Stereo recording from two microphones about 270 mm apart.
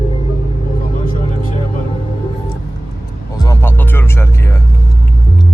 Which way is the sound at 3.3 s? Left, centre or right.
Centre.